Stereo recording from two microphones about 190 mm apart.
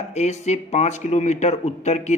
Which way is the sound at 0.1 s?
35° left (ahead or behind).